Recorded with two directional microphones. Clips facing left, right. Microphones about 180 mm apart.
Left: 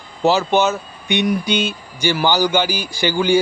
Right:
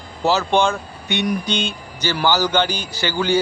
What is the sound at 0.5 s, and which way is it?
A man's voice, 5° left (ahead or behind).